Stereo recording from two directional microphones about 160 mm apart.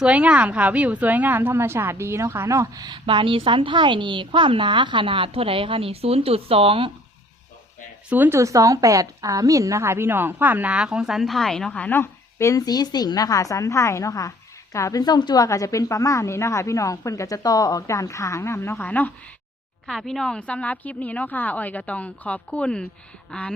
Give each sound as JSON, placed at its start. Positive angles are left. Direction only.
{"t": 0.0, "sound": "a woman's voice", "side_deg": -10}
{"t": 8.1, "sound": "a woman's voice", "side_deg": -15}
{"t": 23.3, "sound": "a sound", "side_deg": 5}